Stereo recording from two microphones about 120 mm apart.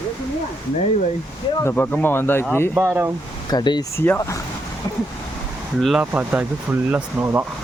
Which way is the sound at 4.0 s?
20° left (ahead or behind).